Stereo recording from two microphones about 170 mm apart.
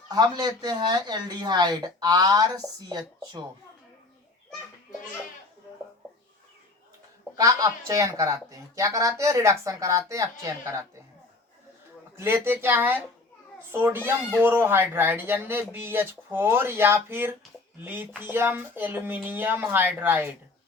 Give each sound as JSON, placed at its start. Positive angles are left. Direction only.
{"t": 0.1, "sound": "speech", "side_deg": -25}
{"t": 7.3, "sound": "speech", "side_deg": -20}
{"t": 12.1, "sound": "speech", "side_deg": -15}